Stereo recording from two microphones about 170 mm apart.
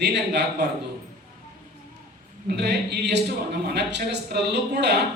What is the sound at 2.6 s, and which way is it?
A man's voice, 85° right.